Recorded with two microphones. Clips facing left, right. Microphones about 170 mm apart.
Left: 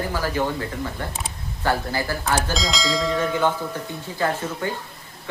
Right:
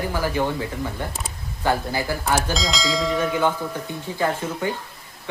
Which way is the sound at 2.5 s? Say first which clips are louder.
Even; centre (ahead or behind).